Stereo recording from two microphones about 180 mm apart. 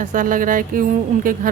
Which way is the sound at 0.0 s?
50° right (ahead or behind).